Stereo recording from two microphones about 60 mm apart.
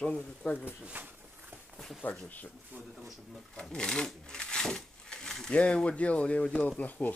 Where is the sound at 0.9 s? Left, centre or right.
Right.